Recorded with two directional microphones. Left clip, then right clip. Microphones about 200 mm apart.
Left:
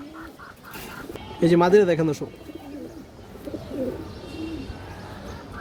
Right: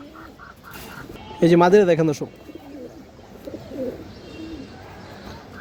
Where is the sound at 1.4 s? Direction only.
40° right (ahead or behind).